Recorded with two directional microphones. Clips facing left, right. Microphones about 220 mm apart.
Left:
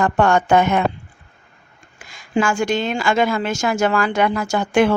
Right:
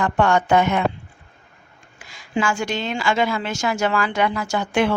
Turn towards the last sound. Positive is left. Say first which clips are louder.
# left 4 dB
turn(degrees=45)  # may be behind; listen again after turning